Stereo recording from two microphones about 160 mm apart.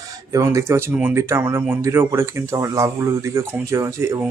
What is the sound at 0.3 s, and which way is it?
Speech, 15° right (ahead or behind).